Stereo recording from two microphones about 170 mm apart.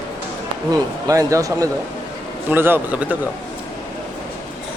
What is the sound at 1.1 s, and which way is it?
A man's voice, 20° right (ahead or behind).